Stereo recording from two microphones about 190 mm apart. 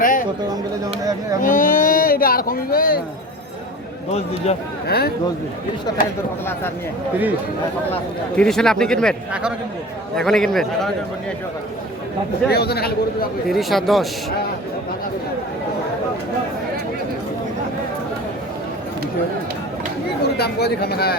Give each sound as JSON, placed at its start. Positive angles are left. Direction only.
{"t": 0.0, "sound": "speech", "side_deg": 45}
{"t": 1.4, "sound": "speech", "side_deg": 45}
{"t": 4.4, "sound": "speech", "side_deg": 35}
{"t": 4.9, "sound": "speech", "side_deg": 55}
{"t": 8.4, "sound": "speech", "side_deg": 5}
{"t": 12.5, "sound": "speech", "side_deg": 55}
{"t": 13.5, "sound": "speech", "side_deg": 0}
{"t": 20.3, "sound": "speech", "side_deg": 60}